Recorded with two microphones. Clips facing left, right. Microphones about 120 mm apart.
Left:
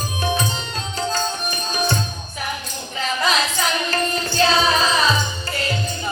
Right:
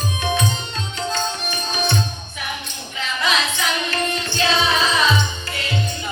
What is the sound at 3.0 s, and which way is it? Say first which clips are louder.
Music: left 1 dB; 40° left (ahead or behind).